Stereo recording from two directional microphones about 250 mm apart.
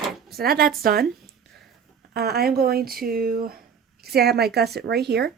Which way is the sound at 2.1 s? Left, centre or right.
Right.